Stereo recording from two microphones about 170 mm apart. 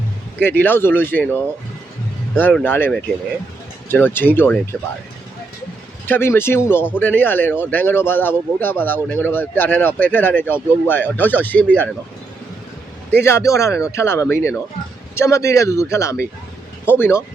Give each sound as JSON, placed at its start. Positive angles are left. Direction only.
{"t": 0.4, "sound": "speech", "side_deg": 10}
{"t": 2.5, "sound": "speech", "side_deg": 10}
{"t": 6.1, "sound": "speech", "side_deg": 15}
{"t": 13.2, "sound": "speech", "side_deg": 15}